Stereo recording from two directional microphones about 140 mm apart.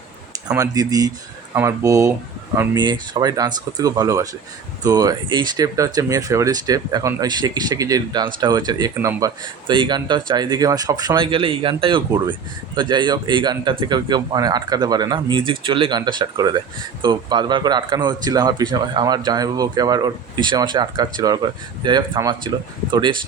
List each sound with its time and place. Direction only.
0.4 s speech: 25° right (ahead or behind)
9.6 s speech: 35° right (ahead or behind)